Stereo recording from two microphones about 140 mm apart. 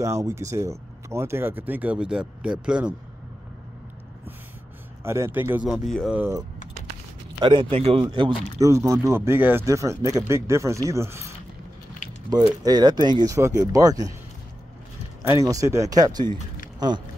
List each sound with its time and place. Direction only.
0.0 s speech: 20° right (ahead or behind)
5.0 s speech: 20° right (ahead or behind)
5.7 s speech: centre (ahead or behind)
6.1 s speech: 15° right (ahead or behind)
7.3 s speech: 35° right (ahead or behind)
8.5 s speech: 20° right (ahead or behind)
12.6 s speech: 30° right (ahead or behind)
15.3 s speech: 25° right (ahead or behind)